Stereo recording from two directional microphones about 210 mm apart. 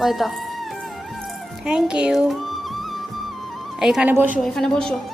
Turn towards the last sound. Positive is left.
turn(degrees=5)  # may be behind; listen again after turning